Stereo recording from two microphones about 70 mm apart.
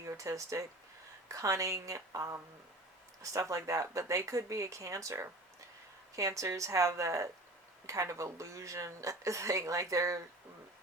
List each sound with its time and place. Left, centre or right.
0.0 s speech: right